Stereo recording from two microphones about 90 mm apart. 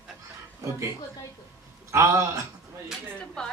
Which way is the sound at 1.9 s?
35° right (ahead or behind).